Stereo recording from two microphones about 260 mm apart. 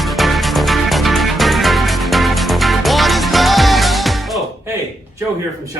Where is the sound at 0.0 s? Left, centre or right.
Centre.